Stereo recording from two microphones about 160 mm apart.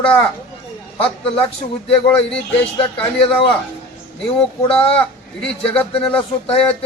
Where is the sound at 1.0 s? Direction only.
35° left (ahead or behind).